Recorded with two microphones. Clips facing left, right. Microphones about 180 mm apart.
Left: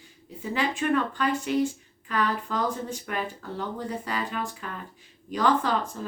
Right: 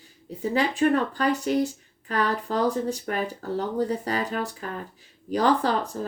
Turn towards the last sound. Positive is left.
turn(degrees=-35)  # may be behind; listen again after turning